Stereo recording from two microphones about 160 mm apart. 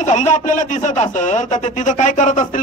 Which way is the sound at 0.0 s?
45° left (ahead or behind).